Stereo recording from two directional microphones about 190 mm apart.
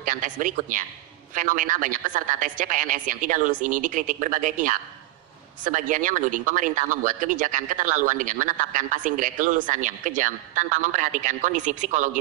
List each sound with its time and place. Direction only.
0.0 s a man's voice: 45° right (ahead or behind)